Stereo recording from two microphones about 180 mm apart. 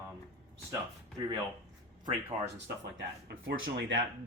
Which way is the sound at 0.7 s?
20° right (ahead or behind).